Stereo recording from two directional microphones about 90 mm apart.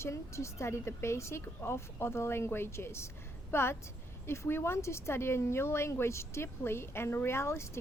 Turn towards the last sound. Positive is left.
turn(degrees=30)  # may be behind; listen again after turning